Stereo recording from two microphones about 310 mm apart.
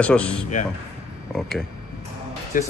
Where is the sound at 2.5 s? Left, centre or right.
Left.